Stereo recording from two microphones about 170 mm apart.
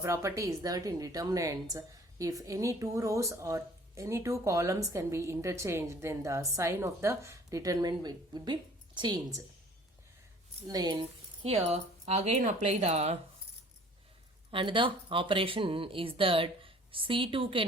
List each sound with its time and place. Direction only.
0.0 s a woman's voice: 15° right (ahead or behind)
10.7 s a woman's voice: 25° right (ahead or behind)
11.4 s speech: 35° right (ahead or behind)
14.5 s speech: 30° right (ahead or behind)